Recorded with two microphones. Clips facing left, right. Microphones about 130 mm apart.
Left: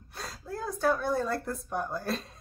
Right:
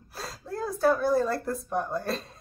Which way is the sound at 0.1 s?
Centre (ahead or behind).